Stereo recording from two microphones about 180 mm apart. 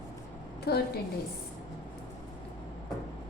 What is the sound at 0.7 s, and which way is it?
Speech, 60° left (ahead or behind).